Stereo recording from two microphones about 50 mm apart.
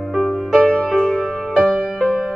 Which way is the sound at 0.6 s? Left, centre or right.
Centre.